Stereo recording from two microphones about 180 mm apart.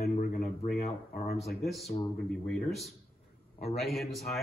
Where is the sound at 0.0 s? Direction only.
50° left (ahead or behind).